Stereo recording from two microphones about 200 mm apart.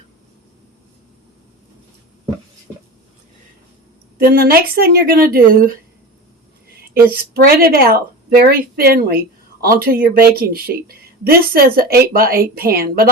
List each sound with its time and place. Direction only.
4.2 s speech: 50° right (ahead or behind)
7.3 s speech: 50° right (ahead or behind)